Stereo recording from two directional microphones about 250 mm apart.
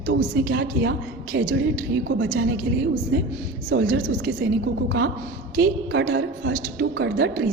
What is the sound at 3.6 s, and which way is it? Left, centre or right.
A woman's voice, right.